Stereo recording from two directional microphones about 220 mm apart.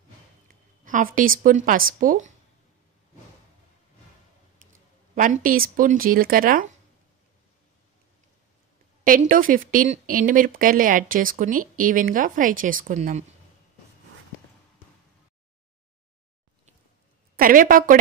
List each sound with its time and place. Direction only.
0.8 s speech: 35° right (ahead or behind)
5.1 s speech: 35° right (ahead or behind)
9.0 s speech: 40° right (ahead or behind)
17.4 s speech: 40° right (ahead or behind)